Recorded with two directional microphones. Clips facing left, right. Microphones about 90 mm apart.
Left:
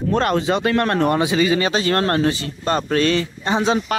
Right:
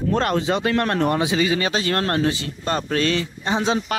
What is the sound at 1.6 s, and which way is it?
Speech, 35° left (ahead or behind).